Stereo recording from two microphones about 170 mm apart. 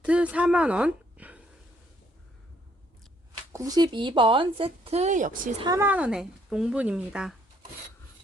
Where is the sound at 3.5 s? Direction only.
20° right (ahead or behind); by 5.5 s 50° right (ahead or behind).